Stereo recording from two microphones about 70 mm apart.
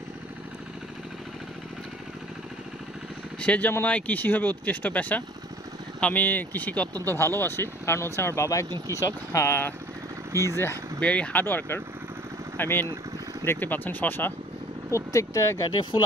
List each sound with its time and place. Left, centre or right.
3.3 s speech: left
7.1 s speech: left
10.3 s speech: right
11.0 s speech: centre
11.4 s speech: left
15.1 s speech: left